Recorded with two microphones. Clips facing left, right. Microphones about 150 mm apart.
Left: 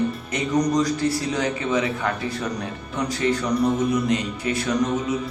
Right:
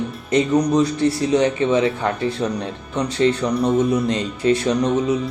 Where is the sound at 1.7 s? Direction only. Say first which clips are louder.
Right 5 dB; 30° right (ahead or behind).